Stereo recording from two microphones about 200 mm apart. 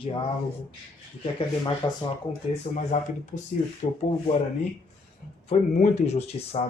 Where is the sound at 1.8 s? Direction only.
20° left (ahead or behind).